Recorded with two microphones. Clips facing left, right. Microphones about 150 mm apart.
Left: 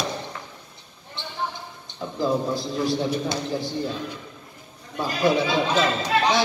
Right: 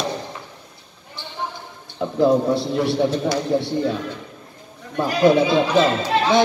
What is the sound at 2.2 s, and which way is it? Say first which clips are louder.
A man's voice: right 7 dB; 65° right (ahead or behind).